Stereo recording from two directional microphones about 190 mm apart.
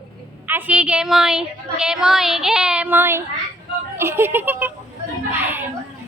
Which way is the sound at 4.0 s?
10° right (ahead or behind).